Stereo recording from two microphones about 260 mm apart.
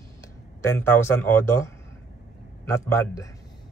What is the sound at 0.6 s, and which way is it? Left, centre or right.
Speech, centre.